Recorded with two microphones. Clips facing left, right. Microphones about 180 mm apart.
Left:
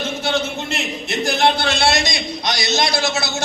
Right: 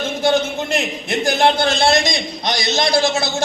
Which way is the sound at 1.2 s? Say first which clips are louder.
Right 2 dB; 50° right (ahead or behind).